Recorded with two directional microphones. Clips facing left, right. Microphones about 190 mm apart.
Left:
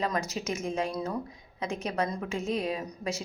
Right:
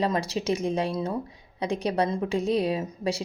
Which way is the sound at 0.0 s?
30° right (ahead or behind).